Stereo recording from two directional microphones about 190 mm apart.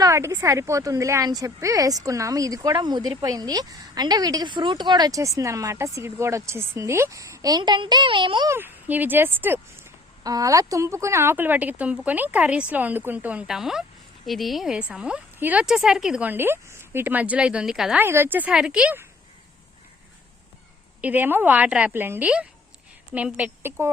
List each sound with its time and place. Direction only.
0.0 s a woman's voice: 15° right (ahead or behind)
8.5 s speech: 10° right (ahead or behind)
21.0 s speech: 10° right (ahead or behind)